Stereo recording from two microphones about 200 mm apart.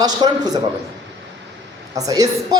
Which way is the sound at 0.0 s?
20° right (ahead or behind).